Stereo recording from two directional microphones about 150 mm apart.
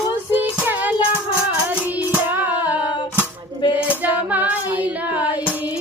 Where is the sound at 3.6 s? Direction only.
30° left (ahead or behind).